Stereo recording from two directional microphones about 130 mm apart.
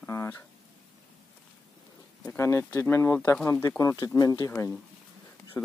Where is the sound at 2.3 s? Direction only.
20° left (ahead or behind).